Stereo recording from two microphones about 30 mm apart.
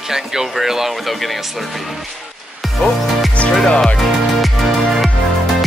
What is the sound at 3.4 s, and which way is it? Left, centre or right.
Music, left.